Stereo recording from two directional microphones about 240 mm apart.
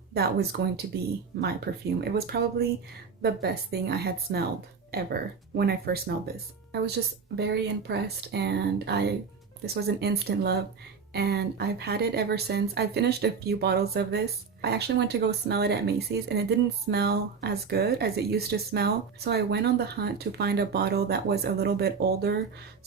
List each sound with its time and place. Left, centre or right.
0.1 s a woman's voice: right